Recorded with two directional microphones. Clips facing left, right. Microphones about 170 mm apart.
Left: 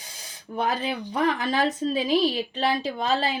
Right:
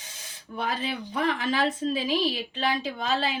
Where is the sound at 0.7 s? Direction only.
45° left (ahead or behind).